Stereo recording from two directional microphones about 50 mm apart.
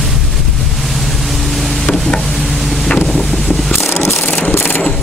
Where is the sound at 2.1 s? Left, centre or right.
Centre.